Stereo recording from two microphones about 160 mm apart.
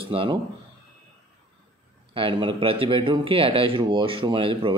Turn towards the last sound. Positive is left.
turn(degrees=-30)  # may be behind; listen again after turning